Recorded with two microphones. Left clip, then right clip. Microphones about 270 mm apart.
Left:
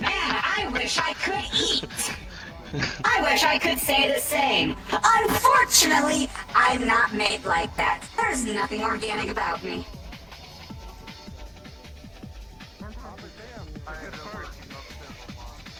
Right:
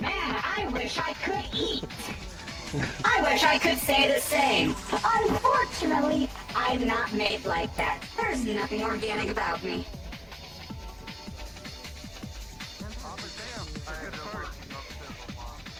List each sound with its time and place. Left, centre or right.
0.0 s music: left
0.8 s speech: centre
2.7 s speech: centre
5.0 s music: left
7.2 s speech: left; by 9.8 s centre
13.1 s music: right
14.0 s music: centre